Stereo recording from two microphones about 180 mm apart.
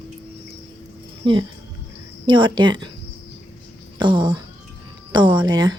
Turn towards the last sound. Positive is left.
turn(degrees=-20)  # may be behind; listen again after turning